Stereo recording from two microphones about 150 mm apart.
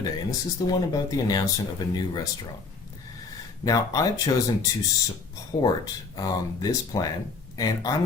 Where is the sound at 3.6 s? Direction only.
25° left (ahead or behind).